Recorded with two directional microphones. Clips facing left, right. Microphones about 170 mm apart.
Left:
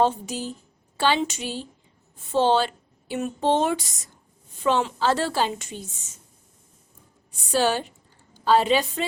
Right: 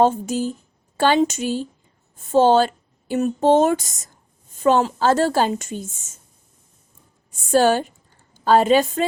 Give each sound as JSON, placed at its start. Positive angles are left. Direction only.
{"t": 0.0, "sound": "a woman's voice", "side_deg": -45}
{"t": 7.3, "sound": "a woman's voice", "side_deg": -45}